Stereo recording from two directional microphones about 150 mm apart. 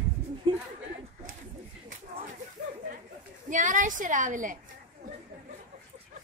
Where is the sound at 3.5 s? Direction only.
60° right (ahead or behind).